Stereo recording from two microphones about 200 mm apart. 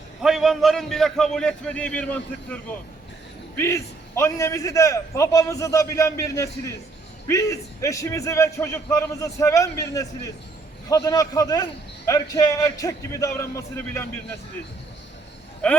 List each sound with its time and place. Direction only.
0.2 s a man's voice: centre (ahead or behind)